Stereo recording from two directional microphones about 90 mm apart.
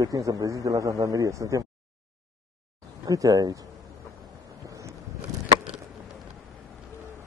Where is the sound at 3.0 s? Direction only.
40° right (ahead or behind).